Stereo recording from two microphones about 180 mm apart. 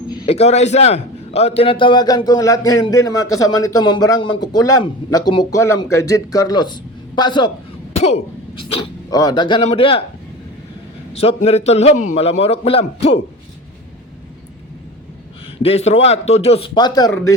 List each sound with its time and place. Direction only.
0.3 s a man's voice: 35° left (ahead or behind)
7.9 s speech: 35° left (ahead or behind)
11.1 s a man's voice: 35° left (ahead or behind)
15.5 s a man's voice: 35° left (ahead or behind)